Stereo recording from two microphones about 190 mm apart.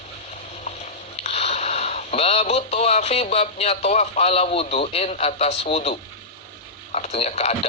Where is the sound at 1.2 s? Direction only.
35° left (ahead or behind).